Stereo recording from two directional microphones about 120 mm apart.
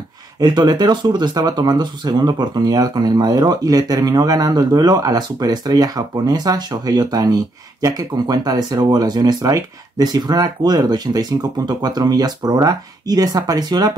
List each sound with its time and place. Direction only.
0.4 s speech: 35° right (ahead or behind)